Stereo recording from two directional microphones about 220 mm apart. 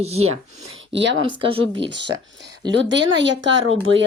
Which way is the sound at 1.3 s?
20° right (ahead or behind).